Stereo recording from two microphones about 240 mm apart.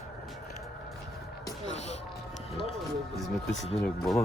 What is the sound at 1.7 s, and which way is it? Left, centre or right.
Basketball bounce, left.